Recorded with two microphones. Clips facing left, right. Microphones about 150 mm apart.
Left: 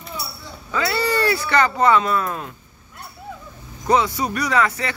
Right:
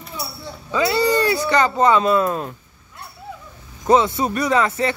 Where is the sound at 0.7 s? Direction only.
15° right (ahead or behind).